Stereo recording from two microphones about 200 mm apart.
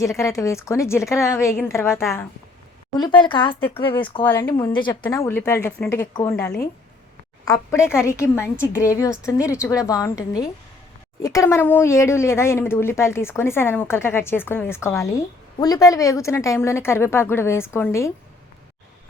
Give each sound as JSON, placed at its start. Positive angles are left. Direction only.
{"t": 0.0, "sound": "speech", "side_deg": 15}
{"t": 4.2, "sound": "speech", "side_deg": 10}